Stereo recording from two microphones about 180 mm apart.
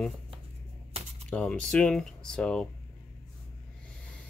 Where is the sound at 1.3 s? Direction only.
5° left (ahead or behind).